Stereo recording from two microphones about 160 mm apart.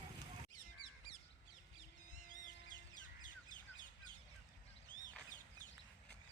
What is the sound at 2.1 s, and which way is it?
Vehicle, 55° left (ahead or behind).